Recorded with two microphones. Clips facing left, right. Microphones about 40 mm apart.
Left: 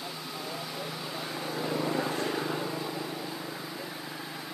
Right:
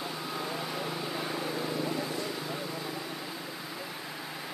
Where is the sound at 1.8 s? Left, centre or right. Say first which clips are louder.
Left 3 dB; left.